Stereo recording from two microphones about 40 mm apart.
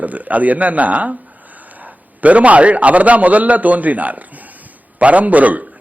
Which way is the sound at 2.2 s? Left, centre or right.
Right.